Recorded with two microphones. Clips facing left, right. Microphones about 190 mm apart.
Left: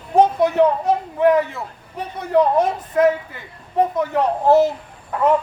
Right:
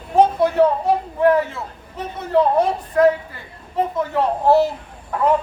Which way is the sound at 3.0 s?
20° left (ahead or behind).